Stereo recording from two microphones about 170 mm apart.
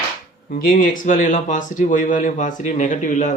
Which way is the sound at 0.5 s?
50° left (ahead or behind).